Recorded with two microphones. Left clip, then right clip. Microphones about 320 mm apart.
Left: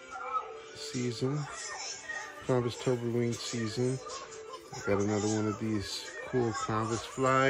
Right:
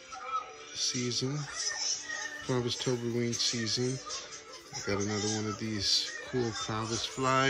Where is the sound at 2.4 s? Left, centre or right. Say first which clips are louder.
Left 3 dB; centre.